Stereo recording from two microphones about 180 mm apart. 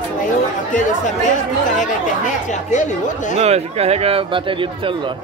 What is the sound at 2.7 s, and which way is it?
Speech, 40° left (ahead or behind).